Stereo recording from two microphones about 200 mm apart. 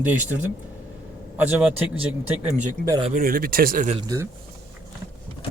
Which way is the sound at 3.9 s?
20° right (ahead or behind).